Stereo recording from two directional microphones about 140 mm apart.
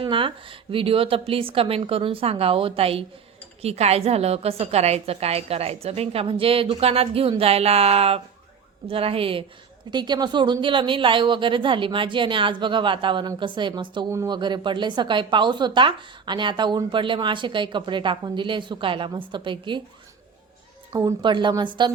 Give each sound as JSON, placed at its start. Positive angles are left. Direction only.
{"t": 0.0, "sound": "a woman's voice", "side_deg": -40}
{"t": 20.9, "sound": "speech", "side_deg": -30}